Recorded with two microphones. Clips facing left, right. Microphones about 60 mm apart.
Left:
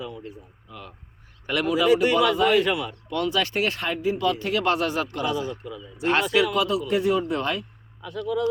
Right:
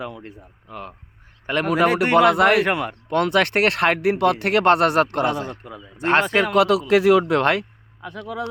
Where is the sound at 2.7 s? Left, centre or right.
Right.